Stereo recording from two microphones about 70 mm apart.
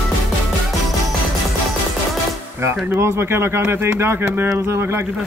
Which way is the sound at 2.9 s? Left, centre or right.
Right.